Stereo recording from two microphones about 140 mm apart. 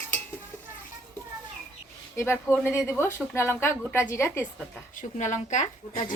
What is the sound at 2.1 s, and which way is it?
Speech, 15° left (ahead or behind).